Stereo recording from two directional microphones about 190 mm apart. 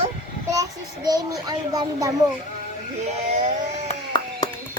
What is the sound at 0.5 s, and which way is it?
A child's voice, 20° right (ahead or behind).